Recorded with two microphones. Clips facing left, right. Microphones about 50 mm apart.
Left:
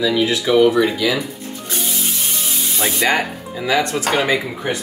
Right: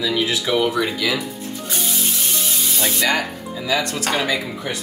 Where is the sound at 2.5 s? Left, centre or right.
Centre.